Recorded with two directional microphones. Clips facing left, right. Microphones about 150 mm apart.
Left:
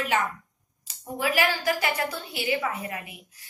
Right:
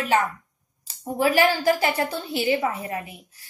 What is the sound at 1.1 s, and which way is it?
A woman's voice, 35° right (ahead or behind).